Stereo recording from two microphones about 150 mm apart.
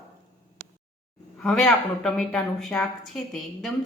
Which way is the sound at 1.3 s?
5° left (ahead or behind).